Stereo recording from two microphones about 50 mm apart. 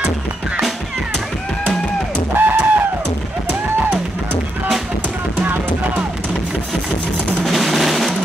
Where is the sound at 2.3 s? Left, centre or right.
Right.